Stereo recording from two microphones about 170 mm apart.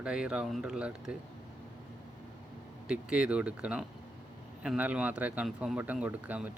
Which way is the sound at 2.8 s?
5° right (ahead or behind).